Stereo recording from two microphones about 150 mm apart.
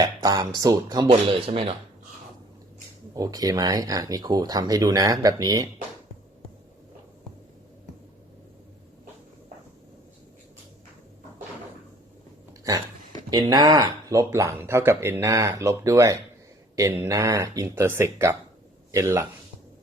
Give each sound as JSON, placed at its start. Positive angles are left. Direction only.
{"t": 0.0, "sound": "speech", "side_deg": -25}
{"t": 1.3, "sound": "speech", "side_deg": -40}
{"t": 3.2, "sound": "speech", "side_deg": -25}
{"t": 12.7, "sound": "speech", "side_deg": -20}